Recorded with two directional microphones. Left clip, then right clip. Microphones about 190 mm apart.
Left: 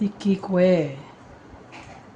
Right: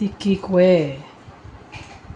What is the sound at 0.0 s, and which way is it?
Speech, 25° right (ahead or behind).